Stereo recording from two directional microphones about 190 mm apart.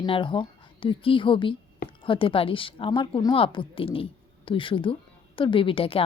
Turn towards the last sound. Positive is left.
turn(degrees=30)  # may be behind; listen again after turning